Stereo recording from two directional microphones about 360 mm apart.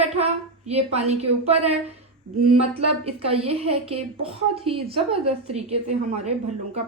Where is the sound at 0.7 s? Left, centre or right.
Centre.